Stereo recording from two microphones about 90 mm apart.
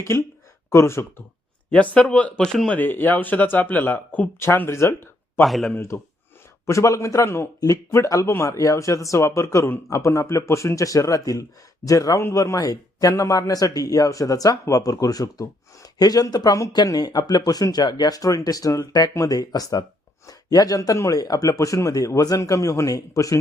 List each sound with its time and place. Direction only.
0.0 s a man's voice: 30° left (ahead or behind)
1.7 s speech: 15° left (ahead or behind)
2.7 s speech: 20° left (ahead or behind)
5.4 s speech: centre (ahead or behind)
5.7 s a man's voice: 30° left (ahead or behind)